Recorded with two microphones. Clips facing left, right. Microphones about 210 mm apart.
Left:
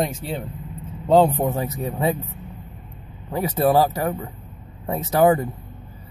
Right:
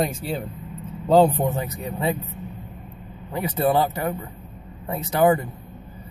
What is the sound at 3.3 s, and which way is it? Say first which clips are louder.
A man's voice: left 3 dB; 40° left (ahead or behind).